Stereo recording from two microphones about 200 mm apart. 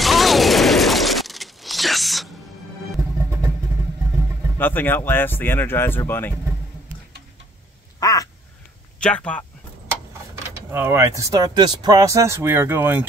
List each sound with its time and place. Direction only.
0.0 s a sound: centre (ahead or behind)
3.0 s music: 15° right (ahead or behind)
4.6 s speech: 10° left (ahead or behind)
8.0 s crow: 15° left (ahead or behind)
9.0 s speech: 5° left (ahead or behind)
10.7 s speech: 10° right (ahead or behind)